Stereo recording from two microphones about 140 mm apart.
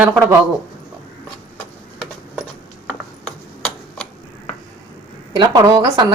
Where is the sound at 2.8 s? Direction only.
5° left (ahead or behind).